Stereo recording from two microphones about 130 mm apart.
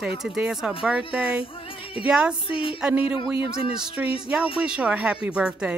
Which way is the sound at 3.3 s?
45° left (ahead or behind).